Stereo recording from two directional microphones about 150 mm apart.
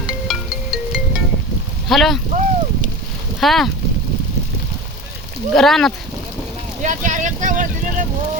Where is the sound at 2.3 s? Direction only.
55° right (ahead or behind).